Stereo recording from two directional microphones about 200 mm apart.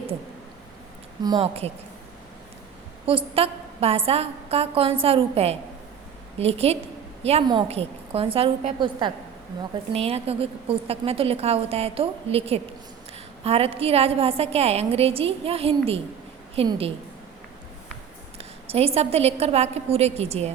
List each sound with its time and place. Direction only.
1.2 s a woman's voice: 25° right (ahead or behind)
3.1 s a woman's voice: 30° right (ahead or behind)
18.7 s a woman's voice: 30° right (ahead or behind)